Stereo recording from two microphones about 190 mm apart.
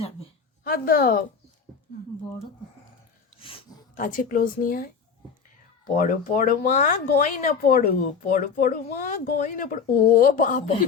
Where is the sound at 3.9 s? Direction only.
45° left (ahead or behind).